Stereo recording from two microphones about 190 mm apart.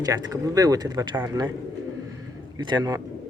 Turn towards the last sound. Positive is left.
turn(degrees=-20)  # may be behind; listen again after turning